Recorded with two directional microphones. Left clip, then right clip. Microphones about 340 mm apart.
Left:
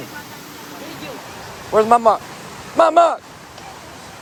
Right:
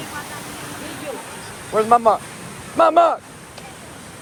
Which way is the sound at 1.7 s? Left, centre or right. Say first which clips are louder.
Left 2 dB; left.